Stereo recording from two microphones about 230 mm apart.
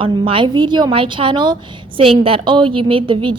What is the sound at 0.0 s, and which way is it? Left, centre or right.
A woman's voice, right.